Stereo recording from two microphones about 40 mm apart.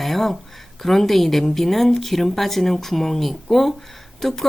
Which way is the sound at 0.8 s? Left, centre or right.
Centre.